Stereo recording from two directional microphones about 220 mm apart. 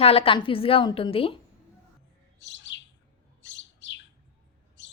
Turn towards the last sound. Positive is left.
turn(degrees=55)  # may be behind; listen again after turning